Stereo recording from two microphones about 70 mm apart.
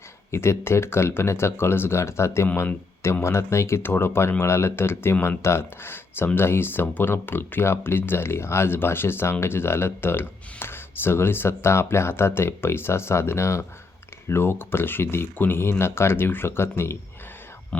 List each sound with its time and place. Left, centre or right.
0.3 s speech: left